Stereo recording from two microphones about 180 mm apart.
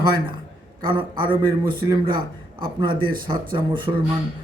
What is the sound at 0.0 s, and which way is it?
Speech, 25° right (ahead or behind).